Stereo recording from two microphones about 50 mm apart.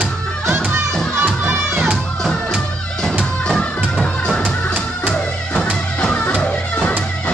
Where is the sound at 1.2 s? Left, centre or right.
Right.